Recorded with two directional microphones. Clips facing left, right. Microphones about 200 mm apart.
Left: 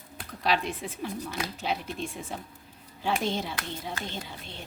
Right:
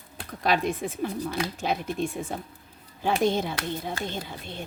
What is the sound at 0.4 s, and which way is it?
Speech, 50° right (ahead or behind).